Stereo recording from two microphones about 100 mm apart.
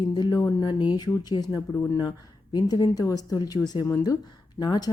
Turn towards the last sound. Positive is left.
turn(degrees=40)  # may be behind; listen again after turning